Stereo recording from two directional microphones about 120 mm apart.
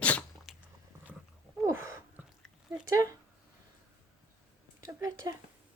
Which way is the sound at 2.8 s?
25° right (ahead or behind).